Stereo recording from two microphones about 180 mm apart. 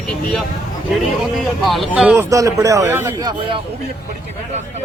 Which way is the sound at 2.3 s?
20° right (ahead or behind).